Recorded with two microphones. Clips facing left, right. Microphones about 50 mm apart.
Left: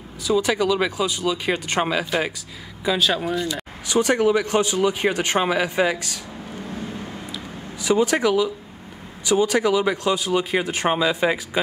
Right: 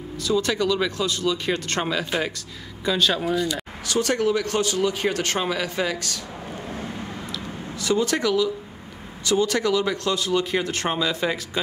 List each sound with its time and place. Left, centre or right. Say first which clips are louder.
0.2 s speech: left 2 dB; centre
3.8 s speech: left 4 dB; centre
7.8 s speech: left 3 dB; centre